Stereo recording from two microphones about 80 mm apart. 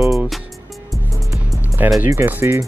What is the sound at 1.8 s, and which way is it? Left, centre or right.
Speech, right.